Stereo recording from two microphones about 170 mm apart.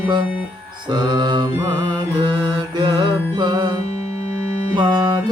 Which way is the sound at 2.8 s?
25° right (ahead or behind).